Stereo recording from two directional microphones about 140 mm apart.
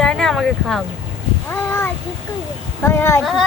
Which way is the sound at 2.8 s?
15° left (ahead or behind).